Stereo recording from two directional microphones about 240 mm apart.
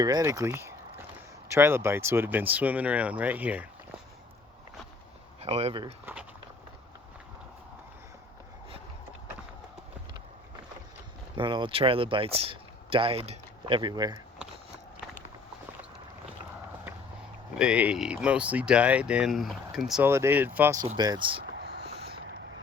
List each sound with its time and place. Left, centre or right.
0.0 s speech: centre
5.4 s speech: right
11.3 s speech: right
17.5 s speech: centre; by 21.4 s right